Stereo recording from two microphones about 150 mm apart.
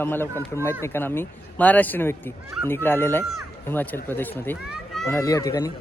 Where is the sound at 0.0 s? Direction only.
15° left (ahead or behind).